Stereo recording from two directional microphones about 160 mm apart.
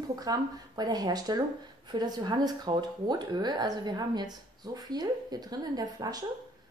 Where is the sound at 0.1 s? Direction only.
25° right (ahead or behind).